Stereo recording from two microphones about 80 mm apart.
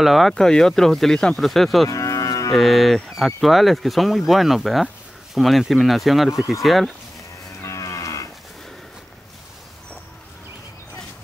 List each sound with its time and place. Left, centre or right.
0.0 s speech: centre
1.9 s moo: left
2.5 s speech: centre
7.6 s livestock: left